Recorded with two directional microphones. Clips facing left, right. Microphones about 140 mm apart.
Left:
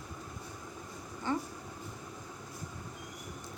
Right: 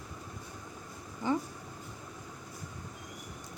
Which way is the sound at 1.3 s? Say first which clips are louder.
Right 3 dB; 15° right (ahead or behind).